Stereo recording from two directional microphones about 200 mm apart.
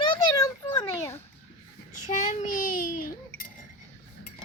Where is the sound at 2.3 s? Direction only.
40° left (ahead or behind).